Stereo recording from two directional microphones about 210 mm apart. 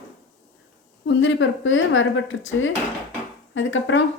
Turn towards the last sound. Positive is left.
turn(degrees=65)  # may be behind; listen again after turning